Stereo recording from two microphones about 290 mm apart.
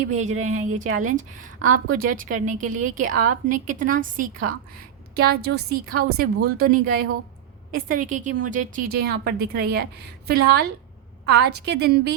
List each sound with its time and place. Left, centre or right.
0.0 s a woman's voice: right